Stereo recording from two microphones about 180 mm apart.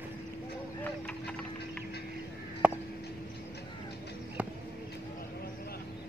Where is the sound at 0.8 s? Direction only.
5° left (ahead or behind).